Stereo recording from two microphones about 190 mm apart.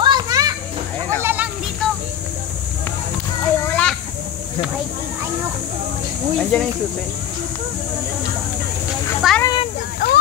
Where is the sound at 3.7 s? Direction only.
5° left (ahead or behind).